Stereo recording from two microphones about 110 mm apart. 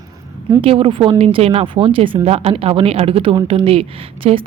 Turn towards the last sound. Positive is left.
turn(degrees=-60)  # may be behind; listen again after turning